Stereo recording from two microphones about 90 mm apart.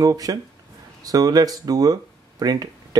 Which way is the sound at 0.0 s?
40° right (ahead or behind).